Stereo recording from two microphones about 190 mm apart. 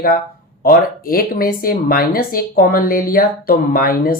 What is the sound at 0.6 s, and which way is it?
Speech, 50° left (ahead or behind).